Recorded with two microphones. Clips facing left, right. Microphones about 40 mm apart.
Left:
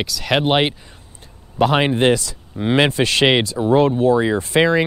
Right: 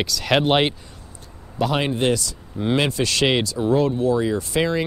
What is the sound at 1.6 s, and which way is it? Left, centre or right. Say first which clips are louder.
Speech: left 5 dB; left.